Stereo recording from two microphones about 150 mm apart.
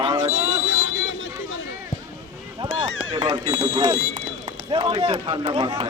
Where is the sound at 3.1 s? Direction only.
35° right (ahead or behind).